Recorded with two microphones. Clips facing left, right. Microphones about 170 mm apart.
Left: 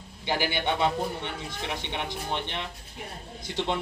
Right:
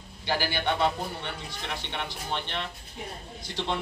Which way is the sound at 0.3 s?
20° left (ahead or behind).